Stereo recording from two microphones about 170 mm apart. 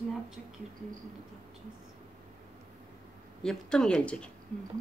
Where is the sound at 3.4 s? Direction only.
5° left (ahead or behind).